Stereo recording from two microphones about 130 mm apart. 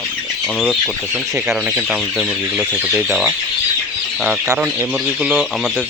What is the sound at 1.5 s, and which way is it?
Speech, 5° right (ahead or behind).